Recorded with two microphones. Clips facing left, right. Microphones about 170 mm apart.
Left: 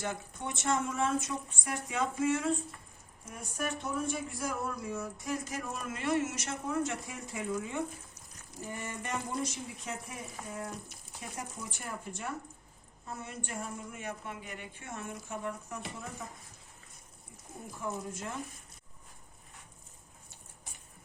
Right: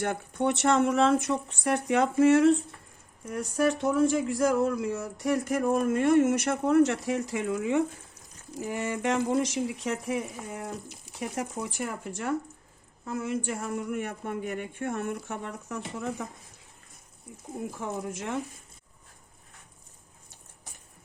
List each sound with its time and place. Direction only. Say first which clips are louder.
0.0 s speech: right 10 dB; 65° right (ahead or behind); by 16.2 s 80° right
17.7 s speech: even; 90° right